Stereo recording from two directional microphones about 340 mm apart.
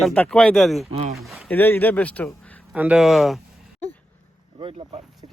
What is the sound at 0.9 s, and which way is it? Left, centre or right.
Speech, centre.